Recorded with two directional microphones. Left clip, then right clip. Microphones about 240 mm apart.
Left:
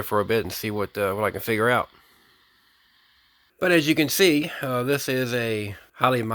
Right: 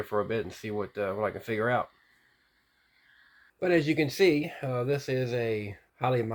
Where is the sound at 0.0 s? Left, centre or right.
Left.